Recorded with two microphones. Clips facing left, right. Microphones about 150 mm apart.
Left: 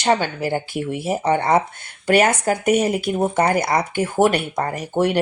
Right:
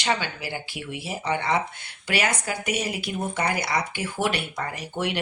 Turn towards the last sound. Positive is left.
turn(degrees=45)  # may be behind; listen again after turning